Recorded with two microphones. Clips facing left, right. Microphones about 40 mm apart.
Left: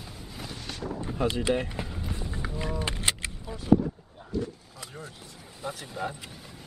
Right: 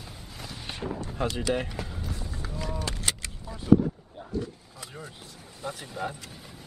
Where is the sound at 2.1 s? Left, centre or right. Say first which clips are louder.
Left 2 dB; left.